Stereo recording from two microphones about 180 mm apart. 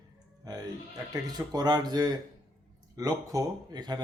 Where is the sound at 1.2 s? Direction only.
20° right (ahead or behind).